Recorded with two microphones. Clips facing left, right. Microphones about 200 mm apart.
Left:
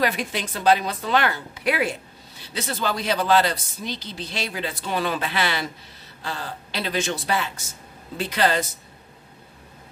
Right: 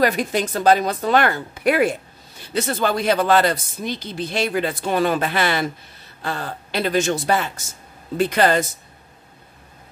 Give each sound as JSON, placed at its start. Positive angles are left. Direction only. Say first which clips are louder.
{"t": 0.0, "sound": "speech", "louder": "right 6 dB", "side_deg": -45}